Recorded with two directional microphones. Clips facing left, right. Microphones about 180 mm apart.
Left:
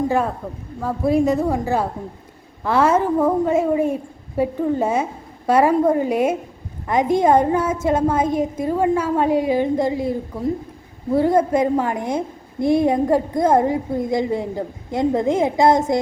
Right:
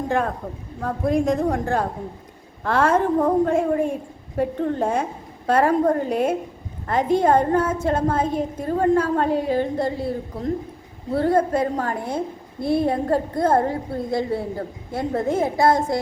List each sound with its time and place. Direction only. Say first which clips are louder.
0.1 s a woman's voice: left 2 dB; 5° left (ahead or behind)